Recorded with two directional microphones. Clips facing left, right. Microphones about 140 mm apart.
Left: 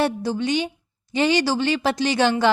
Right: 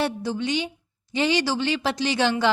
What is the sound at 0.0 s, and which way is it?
A woman's voice, 45° left (ahead or behind).